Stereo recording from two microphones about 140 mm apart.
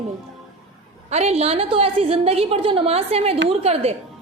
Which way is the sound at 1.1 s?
50° right (ahead or behind).